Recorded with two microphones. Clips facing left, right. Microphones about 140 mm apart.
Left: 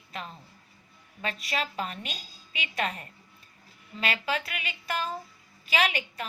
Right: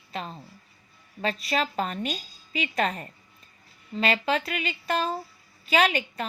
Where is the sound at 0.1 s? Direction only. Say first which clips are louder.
Right 5 dB; 25° right (ahead or behind).